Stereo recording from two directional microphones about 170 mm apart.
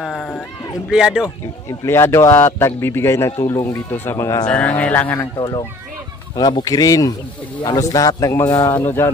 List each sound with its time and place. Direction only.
0.0 s a sound: centre (ahead or behind)
0.8 s speech: 5° right (ahead or behind)
1.7 s a man's voice: 15° left (ahead or behind)
4.5 s a man's voice: 5° left (ahead or behind)
5.4 s a man's voice: 25° left (ahead or behind)